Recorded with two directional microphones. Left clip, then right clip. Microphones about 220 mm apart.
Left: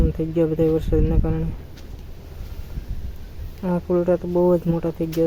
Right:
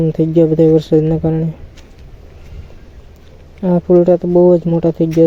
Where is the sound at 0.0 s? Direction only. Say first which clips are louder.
Right 9 dB; 20° right (ahead or behind).